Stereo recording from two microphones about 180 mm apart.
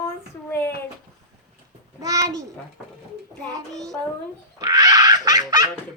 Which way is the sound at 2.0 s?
20° right (ahead or behind).